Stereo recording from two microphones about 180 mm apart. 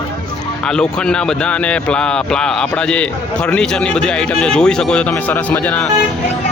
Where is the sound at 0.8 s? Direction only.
5° left (ahead or behind).